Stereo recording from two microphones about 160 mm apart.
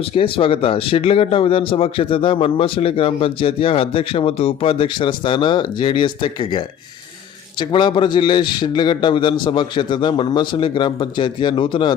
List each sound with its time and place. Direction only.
0.1 s speech: 35° left (ahead or behind)
7.6 s a man's voice: 30° left (ahead or behind)